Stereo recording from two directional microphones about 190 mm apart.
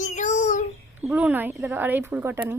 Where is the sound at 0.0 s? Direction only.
40° left (ahead or behind).